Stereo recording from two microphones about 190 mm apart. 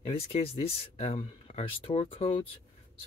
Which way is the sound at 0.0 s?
30° left (ahead or behind).